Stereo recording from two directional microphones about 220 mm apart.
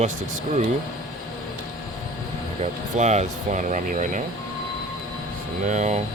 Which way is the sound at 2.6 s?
30° right (ahead or behind).